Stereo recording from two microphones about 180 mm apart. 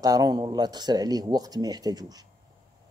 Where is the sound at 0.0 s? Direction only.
20° right (ahead or behind).